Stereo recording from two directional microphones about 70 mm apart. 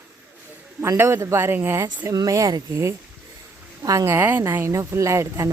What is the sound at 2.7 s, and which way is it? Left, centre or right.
Speech, right.